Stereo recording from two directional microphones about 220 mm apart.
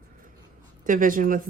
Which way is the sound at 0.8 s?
35° right (ahead or behind).